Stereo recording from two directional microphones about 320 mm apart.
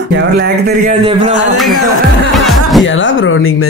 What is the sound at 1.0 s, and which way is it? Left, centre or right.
Speech, centre.